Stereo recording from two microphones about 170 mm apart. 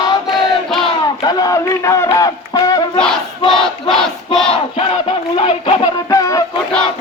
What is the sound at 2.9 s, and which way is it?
Battle cry, 5° left (ahead or behind).